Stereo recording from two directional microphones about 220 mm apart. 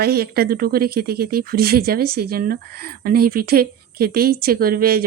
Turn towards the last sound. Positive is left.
turn(degrees=-40)  # may be behind; listen again after turning